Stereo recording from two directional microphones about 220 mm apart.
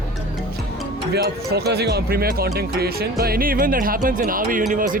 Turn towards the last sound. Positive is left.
turn(degrees=-40)  # may be behind; listen again after turning